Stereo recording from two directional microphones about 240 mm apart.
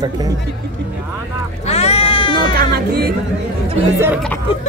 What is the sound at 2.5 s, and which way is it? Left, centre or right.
Music, right.